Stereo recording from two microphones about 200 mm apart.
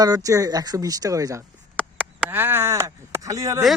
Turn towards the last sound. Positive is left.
turn(degrees=-15)  # may be behind; listen again after turning